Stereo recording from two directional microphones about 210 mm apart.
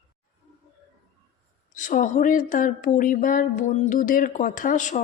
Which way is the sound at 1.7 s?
35° left (ahead or behind).